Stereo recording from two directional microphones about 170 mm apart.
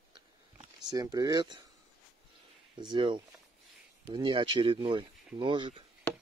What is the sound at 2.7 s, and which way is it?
Speech, 25° right (ahead or behind).